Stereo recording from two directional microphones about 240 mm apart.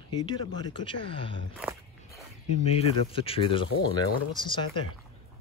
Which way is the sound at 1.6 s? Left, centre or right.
Centre.